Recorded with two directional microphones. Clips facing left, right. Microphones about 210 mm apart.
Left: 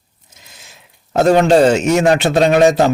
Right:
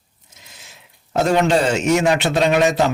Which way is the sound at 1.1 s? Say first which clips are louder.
Left 6 dB; 40° left (ahead or behind).